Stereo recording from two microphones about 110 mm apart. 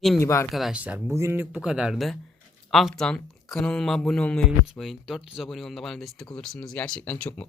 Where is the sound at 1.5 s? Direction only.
5° right (ahead or behind); by 4.4 s 10° left (ahead or behind).